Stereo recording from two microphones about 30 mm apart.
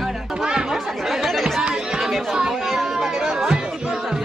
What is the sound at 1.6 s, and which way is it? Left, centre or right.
Chatter, right.